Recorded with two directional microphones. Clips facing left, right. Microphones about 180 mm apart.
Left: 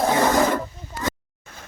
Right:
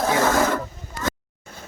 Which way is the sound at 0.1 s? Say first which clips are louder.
Right 1 dB; 15° left (ahead or behind).